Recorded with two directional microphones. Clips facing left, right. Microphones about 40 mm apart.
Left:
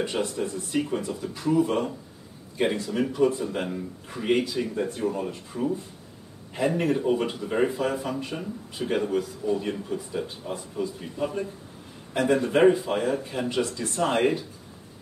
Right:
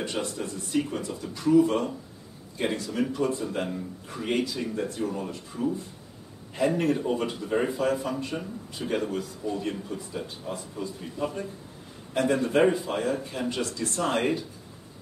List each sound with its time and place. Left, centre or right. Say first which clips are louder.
0.0 s speech: left 4 dB; centre
6.5 s speech: even; centre